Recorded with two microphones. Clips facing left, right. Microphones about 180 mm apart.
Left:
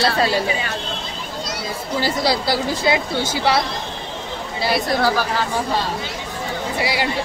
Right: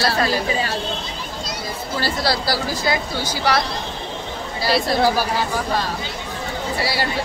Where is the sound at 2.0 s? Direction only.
15° left (ahead or behind).